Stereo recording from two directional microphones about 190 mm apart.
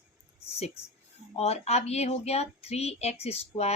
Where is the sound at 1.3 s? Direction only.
35° left (ahead or behind).